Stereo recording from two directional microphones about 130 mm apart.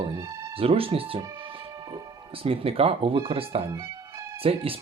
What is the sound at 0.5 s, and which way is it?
Speech, 45° right (ahead or behind).